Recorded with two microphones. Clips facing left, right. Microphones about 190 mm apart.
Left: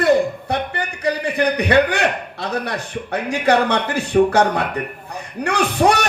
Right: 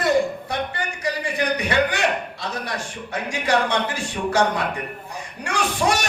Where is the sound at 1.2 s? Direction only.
60° left (ahead or behind).